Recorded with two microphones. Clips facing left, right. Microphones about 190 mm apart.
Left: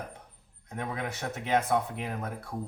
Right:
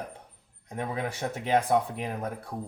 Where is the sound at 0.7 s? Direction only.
30° right (ahead or behind).